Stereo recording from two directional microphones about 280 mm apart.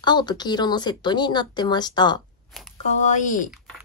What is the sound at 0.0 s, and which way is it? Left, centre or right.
Speech, centre.